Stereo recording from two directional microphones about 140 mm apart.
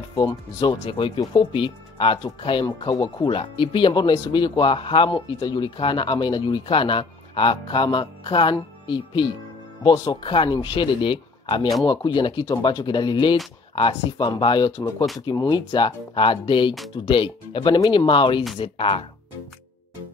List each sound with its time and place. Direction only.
0.1 s speech: 35° left (ahead or behind)